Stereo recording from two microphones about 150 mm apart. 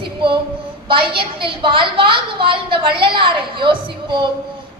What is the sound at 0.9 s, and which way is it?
A woman's voice, 35° right (ahead or behind).